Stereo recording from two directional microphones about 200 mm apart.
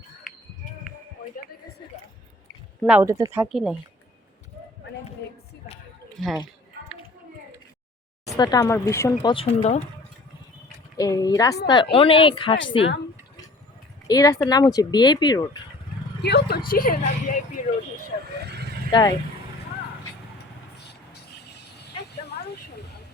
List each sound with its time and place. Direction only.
2.8 s speech: 10° right (ahead or behind)
3.5 s speech: 5° right (ahead or behind)
6.2 s speech: centre (ahead or behind)
8.4 s speech: 20° left (ahead or behind)
9.3 s speech: 30° left (ahead or behind)
10.9 s speech: 20° left (ahead or behind)
14.1 s speech: 15° left (ahead or behind)
16.2 s a woman's voice: 55° left (ahead or behind)
18.4 s vehicle: 55° right (ahead or behind)
18.9 s speech: 20° left (ahead or behind)